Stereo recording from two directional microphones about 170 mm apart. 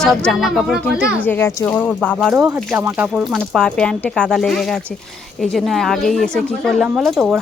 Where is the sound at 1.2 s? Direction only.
15° left (ahead or behind).